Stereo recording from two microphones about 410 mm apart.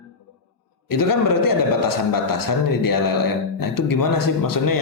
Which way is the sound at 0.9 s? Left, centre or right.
Left.